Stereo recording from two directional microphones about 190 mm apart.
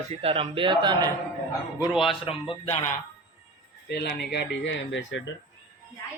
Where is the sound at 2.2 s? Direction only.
30° left (ahead or behind).